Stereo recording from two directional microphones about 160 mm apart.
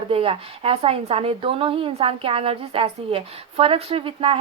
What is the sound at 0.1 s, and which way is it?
A woman's voice, 35° right (ahead or behind).